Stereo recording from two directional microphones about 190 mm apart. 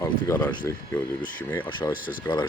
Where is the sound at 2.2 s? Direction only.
25° left (ahead or behind).